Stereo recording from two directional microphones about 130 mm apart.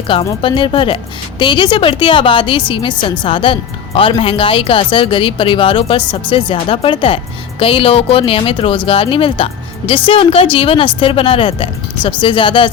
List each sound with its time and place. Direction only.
0.1 s a woman's voice: 40° left (ahead or behind)